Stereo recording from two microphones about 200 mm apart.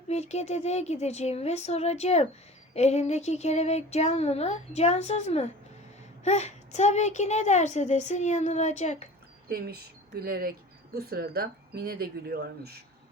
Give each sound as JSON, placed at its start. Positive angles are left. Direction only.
{"t": 0.1, "sound": "a woman's voice", "side_deg": 35}
{"t": 9.5, "sound": "speech", "side_deg": -50}